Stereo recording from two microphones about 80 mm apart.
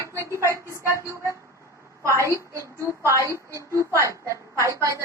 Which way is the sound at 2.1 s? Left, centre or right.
Right.